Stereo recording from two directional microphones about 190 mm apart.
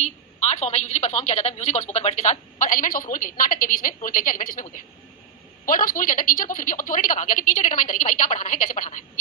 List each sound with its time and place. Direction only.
0.0 s a woman's voice: 35° left (ahead or behind)